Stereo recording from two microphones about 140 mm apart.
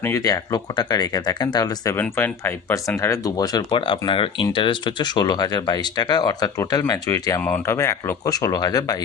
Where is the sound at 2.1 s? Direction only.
15° left (ahead or behind).